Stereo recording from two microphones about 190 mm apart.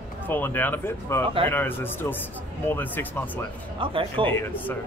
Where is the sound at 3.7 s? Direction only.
30° right (ahead or behind).